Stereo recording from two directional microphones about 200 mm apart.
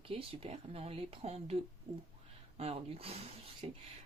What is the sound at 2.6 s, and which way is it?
Speech, 30° right (ahead or behind).